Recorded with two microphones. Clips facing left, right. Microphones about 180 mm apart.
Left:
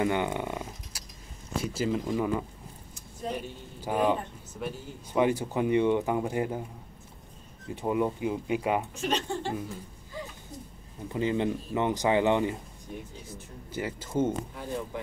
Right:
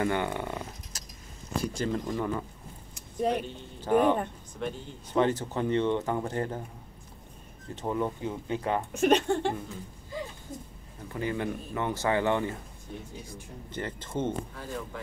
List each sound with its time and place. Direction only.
0.0 s a sound: 15° left (ahead or behind)
1.5 s speech: 5° left (ahead or behind)
2.9 s a sound: 70° right (ahead or behind)
3.8 s speech: 10° left (ahead or behind)
7.7 s speech: 10° left (ahead or behind)
8.9 s speech: 55° right (ahead or behind)
11.1 s speech: 20° left (ahead or behind)